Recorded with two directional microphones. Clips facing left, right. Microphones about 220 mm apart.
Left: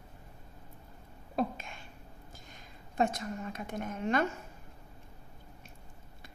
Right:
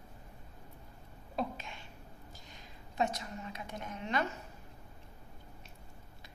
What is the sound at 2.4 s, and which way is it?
A woman's voice, 50° left (ahead or behind).